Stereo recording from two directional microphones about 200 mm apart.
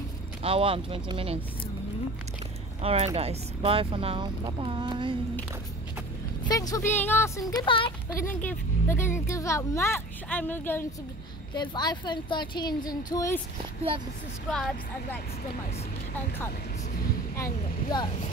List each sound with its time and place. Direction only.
0.4 s speech: 25° right (ahead or behind)
2.8 s speech: 30° right (ahead or behind)
6.4 s speech: 20° left (ahead or behind)
8.5 s speech: 10° left (ahead or behind)
11.5 s speech: 20° left (ahead or behind)
14.5 s speech: 5° left (ahead or behind)